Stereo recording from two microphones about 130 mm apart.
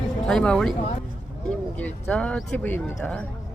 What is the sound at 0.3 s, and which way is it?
Speech, 5° left (ahead or behind).